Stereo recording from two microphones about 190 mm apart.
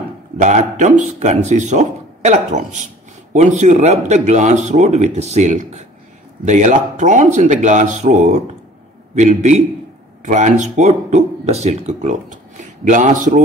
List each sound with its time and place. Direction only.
0.4 s speech: 40° right (ahead or behind)